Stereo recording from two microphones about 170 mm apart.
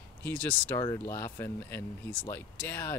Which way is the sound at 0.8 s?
20° left (ahead or behind).